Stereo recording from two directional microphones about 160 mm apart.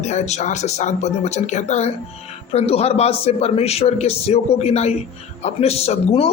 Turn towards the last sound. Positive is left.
turn(degrees=40)  # may be behind; listen again after turning